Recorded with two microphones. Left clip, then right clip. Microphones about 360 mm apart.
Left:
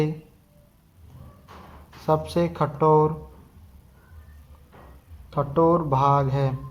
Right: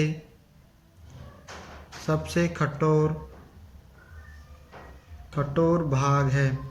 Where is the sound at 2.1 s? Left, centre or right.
Centre.